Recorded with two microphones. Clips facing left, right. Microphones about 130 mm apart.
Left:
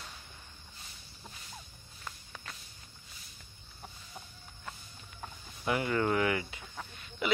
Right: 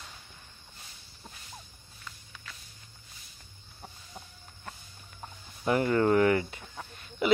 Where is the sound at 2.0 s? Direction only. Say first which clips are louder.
Left 2 dB; 45° left (ahead or behind).